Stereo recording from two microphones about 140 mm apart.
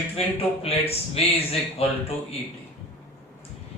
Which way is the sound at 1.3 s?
45° left (ahead or behind).